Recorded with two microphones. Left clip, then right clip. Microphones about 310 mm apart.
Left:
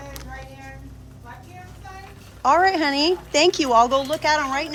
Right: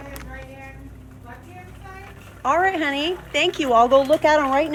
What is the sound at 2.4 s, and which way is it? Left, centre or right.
Speech, centre.